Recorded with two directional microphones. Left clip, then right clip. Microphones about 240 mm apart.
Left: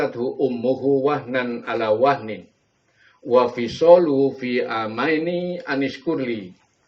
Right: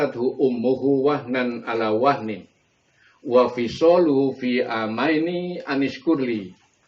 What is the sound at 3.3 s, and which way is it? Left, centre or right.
A man's voice, left.